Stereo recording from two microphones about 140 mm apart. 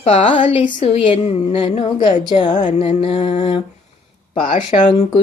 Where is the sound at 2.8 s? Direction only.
45° left (ahead or behind).